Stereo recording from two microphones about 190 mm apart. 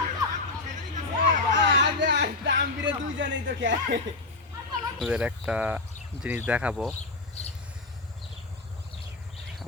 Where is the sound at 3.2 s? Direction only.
75° right (ahead or behind).